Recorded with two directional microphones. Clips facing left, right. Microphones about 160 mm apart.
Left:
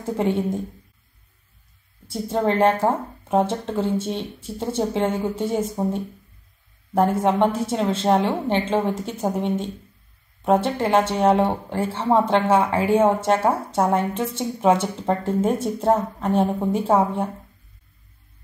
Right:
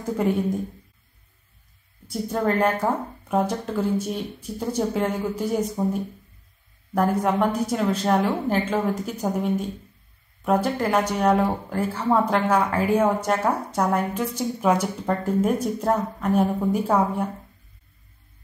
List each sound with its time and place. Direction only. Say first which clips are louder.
0.0 s a woman's voice: left 1 dB; 25° left (ahead or behind)
2.0 s a woman's voice: left 2 dB; 25° left (ahead or behind)